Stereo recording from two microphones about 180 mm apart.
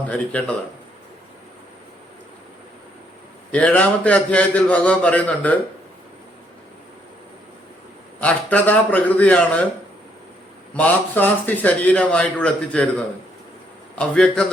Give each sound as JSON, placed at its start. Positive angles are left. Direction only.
{"t": 0.1, "sound": "a man's voice", "side_deg": 5}
{"t": 3.5, "sound": "a man's voice", "side_deg": 5}
{"t": 8.2, "sound": "a man's voice", "side_deg": 10}
{"t": 10.8, "sound": "a man's voice", "side_deg": 10}